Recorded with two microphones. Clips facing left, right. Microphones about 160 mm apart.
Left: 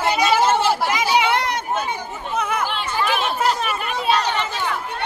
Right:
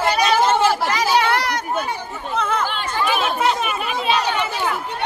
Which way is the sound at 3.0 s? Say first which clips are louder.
Right 1 dB; centre (ahead or behind).